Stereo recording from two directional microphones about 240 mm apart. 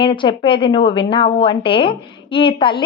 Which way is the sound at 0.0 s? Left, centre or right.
Centre.